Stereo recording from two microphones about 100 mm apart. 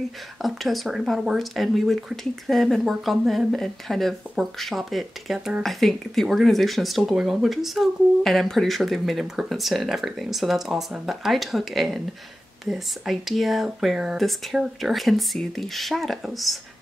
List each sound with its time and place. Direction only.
0.4 s speech: centre (ahead or behind)